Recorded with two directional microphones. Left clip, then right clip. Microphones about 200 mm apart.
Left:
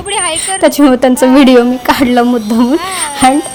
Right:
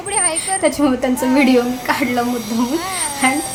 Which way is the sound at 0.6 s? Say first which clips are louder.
Left 10 dB; 45° left (ahead or behind).